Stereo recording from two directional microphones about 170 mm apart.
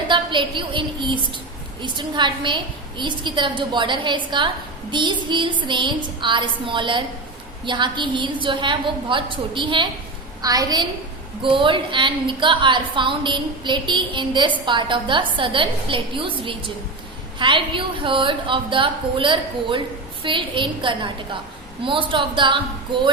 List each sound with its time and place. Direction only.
0.1 s a woman's voice: 30° right (ahead or behind)